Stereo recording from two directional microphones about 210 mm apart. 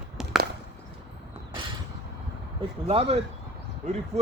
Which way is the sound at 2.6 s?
25° right (ahead or behind).